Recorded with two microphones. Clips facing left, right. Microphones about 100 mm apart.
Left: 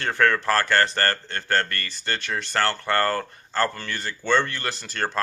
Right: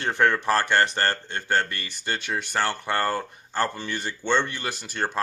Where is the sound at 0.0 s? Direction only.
20° right (ahead or behind).